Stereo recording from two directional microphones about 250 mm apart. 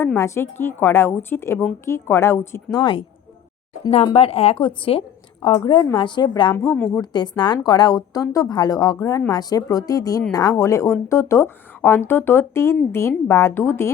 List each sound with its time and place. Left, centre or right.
0.0 s a woman's voice: centre
6.7 s a woman's voice: centre